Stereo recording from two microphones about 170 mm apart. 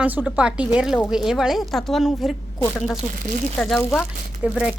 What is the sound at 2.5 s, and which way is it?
Speech, 10° left (ahead or behind).